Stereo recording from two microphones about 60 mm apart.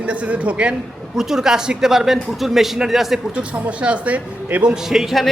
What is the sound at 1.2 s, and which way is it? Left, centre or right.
A woman's voice, centre.